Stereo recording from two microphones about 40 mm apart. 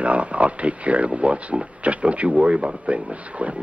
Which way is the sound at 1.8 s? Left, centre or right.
Right.